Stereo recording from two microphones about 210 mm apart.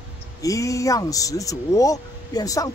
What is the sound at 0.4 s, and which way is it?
Speech, 15° left (ahead or behind).